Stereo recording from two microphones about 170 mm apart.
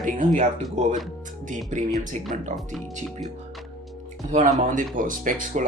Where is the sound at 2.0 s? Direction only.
50° right (ahead or behind).